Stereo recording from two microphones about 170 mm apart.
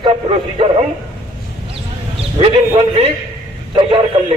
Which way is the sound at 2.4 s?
35° right (ahead or behind).